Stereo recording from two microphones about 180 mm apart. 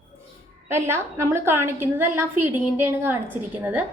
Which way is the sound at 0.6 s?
15° right (ahead or behind).